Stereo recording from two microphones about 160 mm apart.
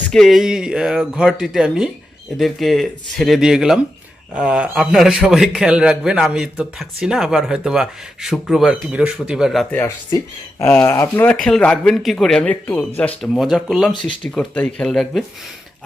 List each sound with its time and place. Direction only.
0.1 s a man's voice: centre (ahead or behind)
10.6 s speech: 15° left (ahead or behind)
11.3 s a man's voice: 5° left (ahead or behind)